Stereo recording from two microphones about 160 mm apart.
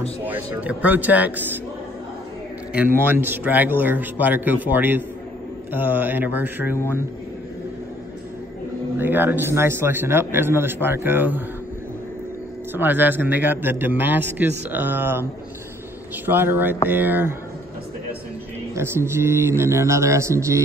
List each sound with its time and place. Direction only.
0.2 s a man's voice: 10° right (ahead or behind)
2.7 s a man's voice: 10° right (ahead or behind)
8.9 s a man's voice: 15° right (ahead or behind)
12.7 s a man's voice: 10° right (ahead or behind)
16.3 s a man's voice: 15° right (ahead or behind)
18.8 s a man's voice: 15° right (ahead or behind)